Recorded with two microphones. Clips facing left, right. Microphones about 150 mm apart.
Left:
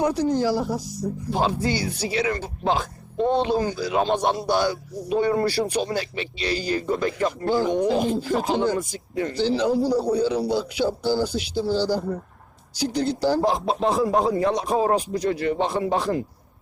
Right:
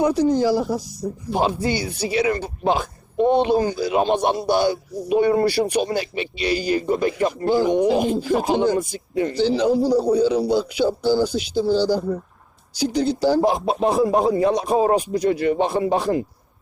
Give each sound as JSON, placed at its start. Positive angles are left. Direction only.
{"t": 0.0, "sound": "speech", "side_deg": -15}